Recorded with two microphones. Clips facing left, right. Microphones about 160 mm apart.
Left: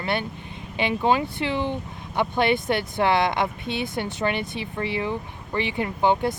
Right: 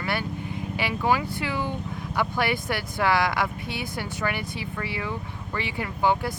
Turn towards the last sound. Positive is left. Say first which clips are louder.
# left 3 dB
turn(degrees=20)  # may be behind; listen again after turning